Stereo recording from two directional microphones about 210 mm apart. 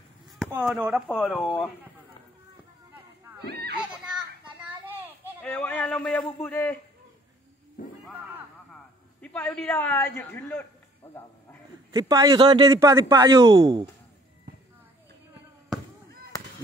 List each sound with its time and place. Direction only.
0.7 s speech: 5° right (ahead or behind)
1.0 s speech: 5° left (ahead or behind)
4.0 s children playing: 5° right (ahead or behind)
5.4 s a man's voice: 10° left (ahead or behind)
9.2 s a man's voice: 5° left (ahead or behind)
11.9 s speech: 20° right (ahead or behind)